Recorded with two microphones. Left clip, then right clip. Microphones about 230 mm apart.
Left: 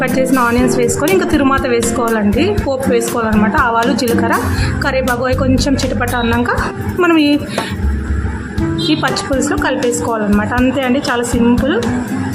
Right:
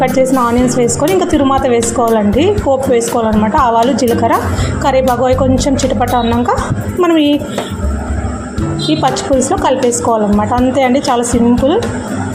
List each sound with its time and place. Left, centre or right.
0.3 s a woman's voice: centre
8.9 s a woman's voice: centre